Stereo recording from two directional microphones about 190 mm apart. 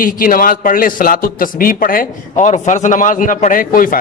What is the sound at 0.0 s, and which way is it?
A man's voice, 45° left (ahead or behind).